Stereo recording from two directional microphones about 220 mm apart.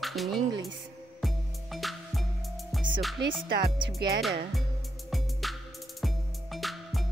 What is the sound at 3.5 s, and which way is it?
Speech, 45° right (ahead or behind).